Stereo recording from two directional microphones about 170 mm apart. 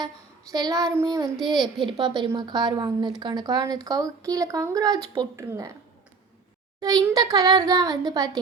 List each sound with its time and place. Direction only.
0.5 s speech: 20° right (ahead or behind)
6.7 s speech: 25° right (ahead or behind)